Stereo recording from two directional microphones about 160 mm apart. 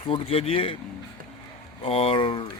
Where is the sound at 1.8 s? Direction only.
35° left (ahead or behind).